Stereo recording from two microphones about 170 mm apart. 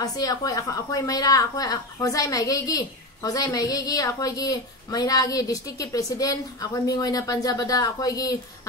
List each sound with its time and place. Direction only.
0.0 s a woman's voice: 20° left (ahead or behind)